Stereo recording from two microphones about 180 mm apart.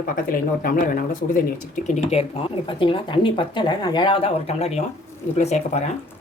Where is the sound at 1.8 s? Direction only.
40° left (ahead or behind).